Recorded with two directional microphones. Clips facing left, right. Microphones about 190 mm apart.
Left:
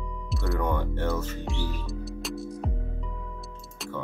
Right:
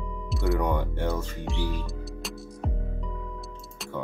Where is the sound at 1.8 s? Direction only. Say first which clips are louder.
Left 2 dB; centre (ahead or behind).